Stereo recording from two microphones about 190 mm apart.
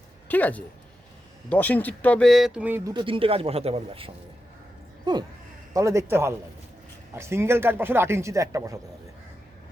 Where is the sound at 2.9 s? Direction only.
25° right (ahead or behind).